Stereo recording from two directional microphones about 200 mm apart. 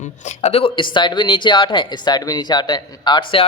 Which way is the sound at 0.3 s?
30° left (ahead or behind).